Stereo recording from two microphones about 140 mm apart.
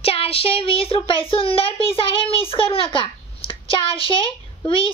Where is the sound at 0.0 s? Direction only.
45° left (ahead or behind).